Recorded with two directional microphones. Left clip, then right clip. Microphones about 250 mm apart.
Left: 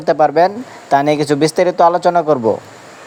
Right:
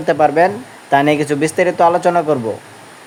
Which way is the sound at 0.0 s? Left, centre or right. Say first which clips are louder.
Left 1 dB; left.